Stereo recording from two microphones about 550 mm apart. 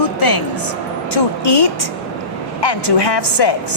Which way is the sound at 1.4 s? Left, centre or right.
Left.